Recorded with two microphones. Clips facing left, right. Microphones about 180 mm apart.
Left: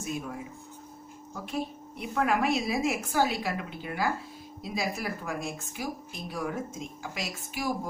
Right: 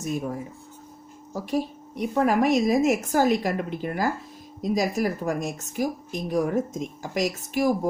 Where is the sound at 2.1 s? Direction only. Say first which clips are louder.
Right 6 dB; 40° right (ahead or behind).